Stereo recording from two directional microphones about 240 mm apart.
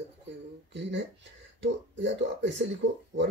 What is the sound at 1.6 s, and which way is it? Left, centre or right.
Speech, right.